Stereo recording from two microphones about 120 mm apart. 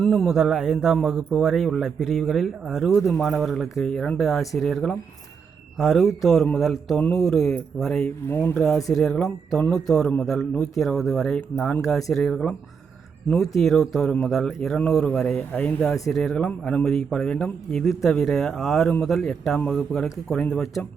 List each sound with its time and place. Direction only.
0.0 s a man's voice: 5° left (ahead or behind)
8.3 s speech: 15° left (ahead or behind)
8.5 s a man's voice: 5° left (ahead or behind)